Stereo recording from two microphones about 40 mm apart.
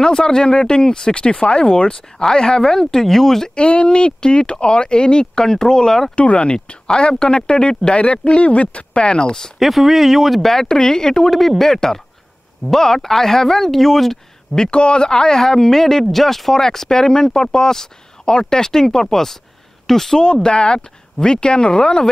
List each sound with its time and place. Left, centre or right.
0.0 s speech: centre
3.5 s speech: left
6.1 s speech: left
9.6 s speech: centre
14.6 s speech: left; by 20.2 s centre
20.4 s speech: left